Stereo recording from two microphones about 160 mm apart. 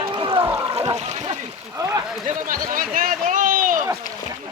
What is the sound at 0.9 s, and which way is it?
Splash, 45° right (ahead or behind).